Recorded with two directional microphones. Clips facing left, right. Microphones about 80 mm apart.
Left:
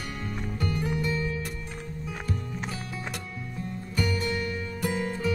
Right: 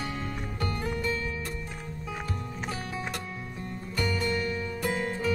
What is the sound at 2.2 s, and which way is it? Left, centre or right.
Music, centre.